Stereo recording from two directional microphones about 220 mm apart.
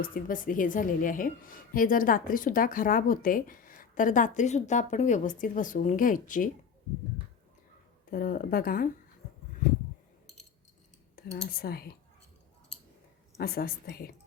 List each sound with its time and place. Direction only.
0.0 s a woman's voice: 40° left (ahead or behind)
8.1 s a woman's voice: 40° left (ahead or behind)
11.2 s a woman's voice: 45° left (ahead or behind)
13.3 s a woman's voice: 45° left (ahead or behind)